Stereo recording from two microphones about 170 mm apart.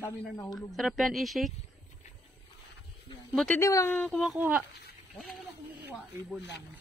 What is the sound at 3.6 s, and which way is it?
Speech, 15° left (ahead or behind).